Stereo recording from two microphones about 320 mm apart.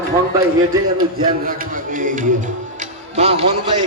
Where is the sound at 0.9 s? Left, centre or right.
Right.